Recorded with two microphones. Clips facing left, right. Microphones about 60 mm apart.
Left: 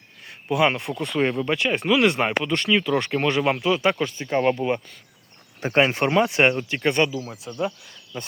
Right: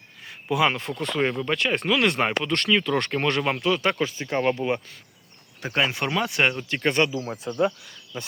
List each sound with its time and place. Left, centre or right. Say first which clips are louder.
0.3 s a sound: left 2 dB; centre
0.7 s speech: left 1 dB; centre
4.3 s speech: left 3 dB; centre
5.5 s speech: left 5 dB; left
6.7 s speech: left 1 dB; centre
7.5 s speech: right 5 dB; centre